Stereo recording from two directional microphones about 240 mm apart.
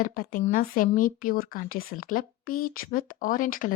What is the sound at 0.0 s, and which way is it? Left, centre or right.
Speech, left.